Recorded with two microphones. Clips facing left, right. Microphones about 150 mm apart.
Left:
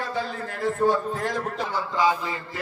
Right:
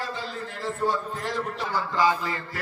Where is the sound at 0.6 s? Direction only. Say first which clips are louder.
Left 5 dB; 60° left (ahead or behind).